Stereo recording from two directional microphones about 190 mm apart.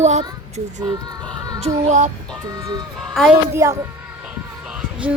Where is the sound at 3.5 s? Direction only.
15° right (ahead or behind).